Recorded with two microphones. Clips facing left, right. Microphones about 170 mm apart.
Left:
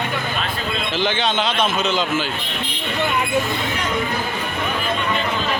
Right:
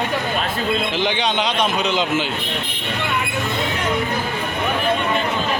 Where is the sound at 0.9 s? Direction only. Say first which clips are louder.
Even; 15° right (ahead or behind).